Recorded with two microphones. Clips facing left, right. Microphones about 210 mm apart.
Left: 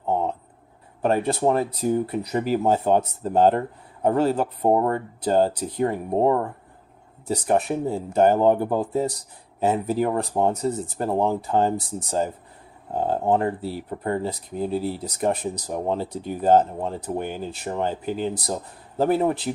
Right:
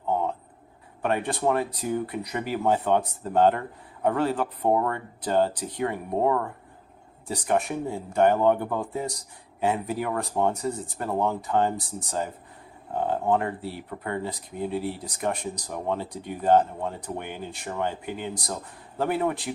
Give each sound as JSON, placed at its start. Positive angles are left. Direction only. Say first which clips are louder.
{"t": 1.0, "sound": "speech", "louder": "left 4 dB", "side_deg": 30}